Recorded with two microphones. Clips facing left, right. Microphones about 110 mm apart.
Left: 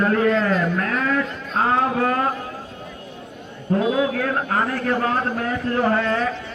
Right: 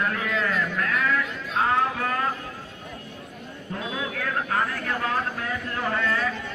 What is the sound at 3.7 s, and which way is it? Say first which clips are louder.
A man's voice: left 12 dB; 35° left (ahead or behind).